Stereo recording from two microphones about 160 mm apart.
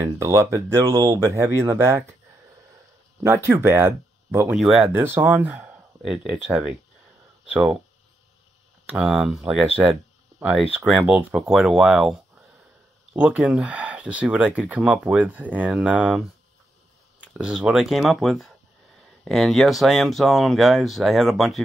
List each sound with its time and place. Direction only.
0.0 s speech: 20° right (ahead or behind)
3.3 s speech: 15° right (ahead or behind)
4.6 s speech: centre (ahead or behind)
4.8 s speech: 15° right (ahead or behind)
8.9 s speech: 5° right (ahead or behind)
17.4 s speech: 5° right (ahead or behind)